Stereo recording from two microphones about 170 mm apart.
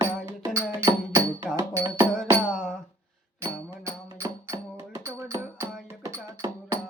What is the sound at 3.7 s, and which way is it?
Music, 15° right (ahead or behind).